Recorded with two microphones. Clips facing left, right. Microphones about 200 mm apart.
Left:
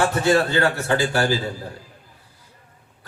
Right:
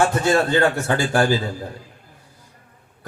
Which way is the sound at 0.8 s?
50° right (ahead or behind).